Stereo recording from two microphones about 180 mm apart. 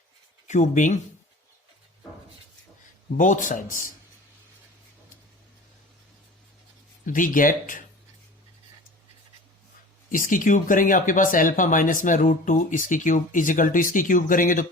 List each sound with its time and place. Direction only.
0.4 s speech: 40° left (ahead or behind)
3.2 s speech: 45° left (ahead or behind)
7.0 s speech: 50° left (ahead or behind)
10.1 s speech: 50° left (ahead or behind)